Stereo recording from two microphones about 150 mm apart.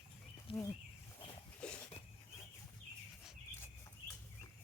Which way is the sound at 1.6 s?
5° left (ahead or behind).